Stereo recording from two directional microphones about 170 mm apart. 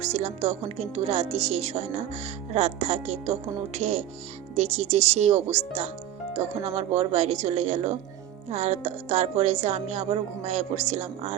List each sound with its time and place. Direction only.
0.0 s speech: 40° right (ahead or behind)